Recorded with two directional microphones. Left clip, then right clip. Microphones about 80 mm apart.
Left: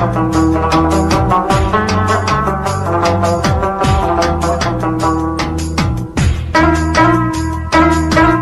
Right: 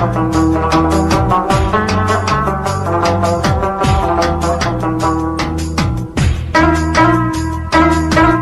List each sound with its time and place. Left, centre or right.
0.0 s music: right
6.5 s music: right